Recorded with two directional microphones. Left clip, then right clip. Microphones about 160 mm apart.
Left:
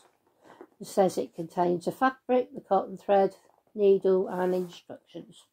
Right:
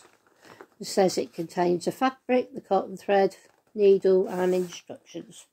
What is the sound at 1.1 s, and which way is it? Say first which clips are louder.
Speech: right 2 dB; 10° right (ahead or behind).